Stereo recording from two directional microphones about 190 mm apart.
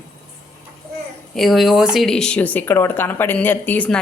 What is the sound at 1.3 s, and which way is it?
Speech, centre (ahead or behind).